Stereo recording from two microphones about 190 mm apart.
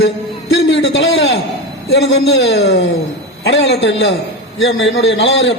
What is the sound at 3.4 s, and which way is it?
Speech, 55° left (ahead or behind).